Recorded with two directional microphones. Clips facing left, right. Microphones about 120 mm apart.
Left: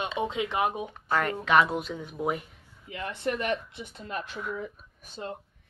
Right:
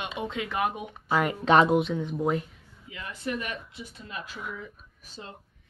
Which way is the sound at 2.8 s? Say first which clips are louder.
Left 3 dB; 55° left (ahead or behind).